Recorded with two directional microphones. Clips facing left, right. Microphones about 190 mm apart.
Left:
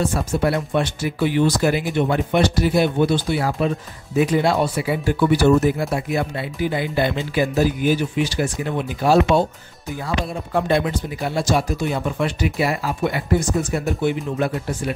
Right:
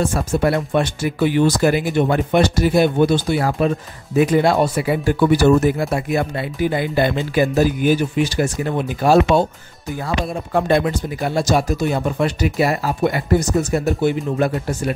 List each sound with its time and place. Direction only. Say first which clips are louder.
0.1 s speech: right 2 dB; 50° right (ahead or behind)